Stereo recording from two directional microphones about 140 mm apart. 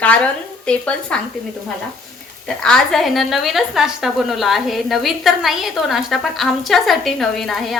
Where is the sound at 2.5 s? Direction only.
5° left (ahead or behind).